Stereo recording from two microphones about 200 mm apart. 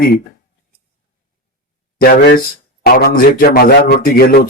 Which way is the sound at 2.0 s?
45° left (ahead or behind).